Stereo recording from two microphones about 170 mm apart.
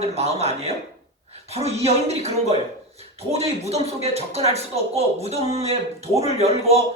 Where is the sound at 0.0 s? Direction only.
40° right (ahead or behind).